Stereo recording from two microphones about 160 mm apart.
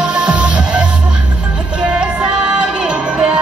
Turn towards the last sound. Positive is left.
turn(degrees=-5)  # may be behind; listen again after turning